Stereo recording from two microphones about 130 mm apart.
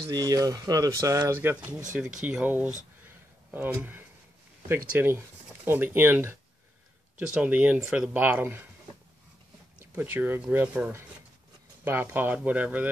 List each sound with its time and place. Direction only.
0.1 s speech: 30° right (ahead or behind)
9.9 s speech: 15° right (ahead or behind)